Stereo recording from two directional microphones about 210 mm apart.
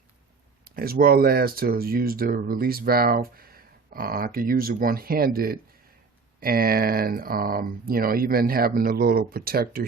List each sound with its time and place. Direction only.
0.6 s speech: 45° right (ahead or behind)